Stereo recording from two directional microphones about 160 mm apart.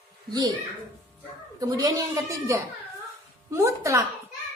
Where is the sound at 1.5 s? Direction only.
20° right (ahead or behind).